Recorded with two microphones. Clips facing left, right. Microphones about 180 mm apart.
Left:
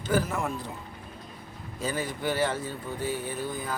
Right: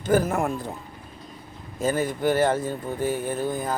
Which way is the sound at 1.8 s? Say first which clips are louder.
Right 7 dB; 50° right (ahead or behind).